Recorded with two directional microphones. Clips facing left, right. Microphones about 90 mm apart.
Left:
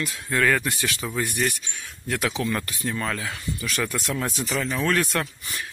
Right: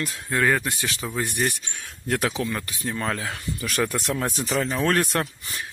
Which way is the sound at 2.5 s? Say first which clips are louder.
Left 2 dB; 10° right (ahead or behind).